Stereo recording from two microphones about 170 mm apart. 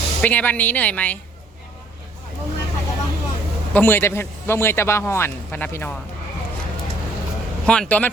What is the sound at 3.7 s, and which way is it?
A man's voice, 10° left (ahead or behind).